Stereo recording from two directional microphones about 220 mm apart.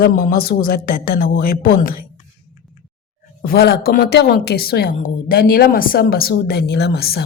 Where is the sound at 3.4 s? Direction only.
45° left (ahead or behind).